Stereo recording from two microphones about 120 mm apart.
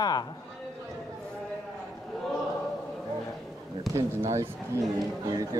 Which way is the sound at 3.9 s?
25° right (ahead or behind).